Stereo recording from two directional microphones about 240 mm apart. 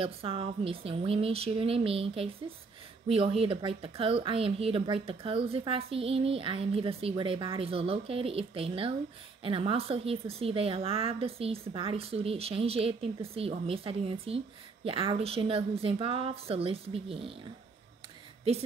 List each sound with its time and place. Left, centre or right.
0.0 s a woman's voice: right